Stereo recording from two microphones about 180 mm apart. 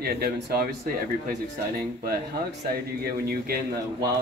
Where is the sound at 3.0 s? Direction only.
60° right (ahead or behind).